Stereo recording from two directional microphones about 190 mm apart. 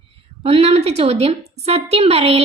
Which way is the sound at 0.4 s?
30° right (ahead or behind).